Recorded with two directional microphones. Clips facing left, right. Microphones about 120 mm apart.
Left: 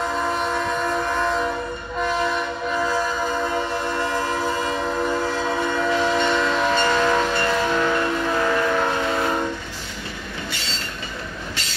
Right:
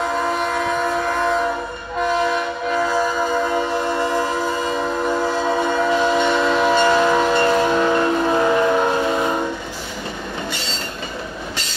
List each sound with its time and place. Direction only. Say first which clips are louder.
0.3 s train: right 3 dB; 5° right (ahead or behind)
3.5 s train: right 4 dB; 15° right (ahead or behind)